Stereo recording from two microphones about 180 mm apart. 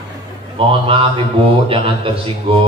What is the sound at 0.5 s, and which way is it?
Speech, 30° right (ahead or behind).